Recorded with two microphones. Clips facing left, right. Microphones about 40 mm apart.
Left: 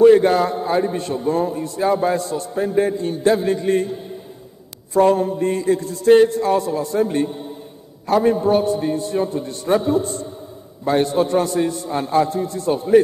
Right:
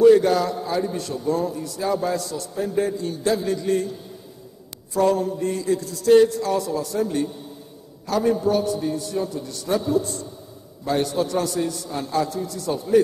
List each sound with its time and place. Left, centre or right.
0.0 s a man's voice: left